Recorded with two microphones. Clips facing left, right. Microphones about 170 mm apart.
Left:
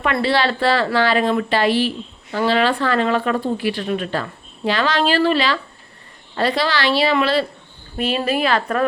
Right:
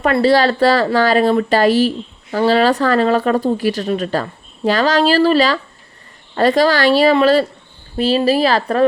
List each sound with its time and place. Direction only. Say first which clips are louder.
0.0 s speech: right 6 dB; 40° right (ahead or behind)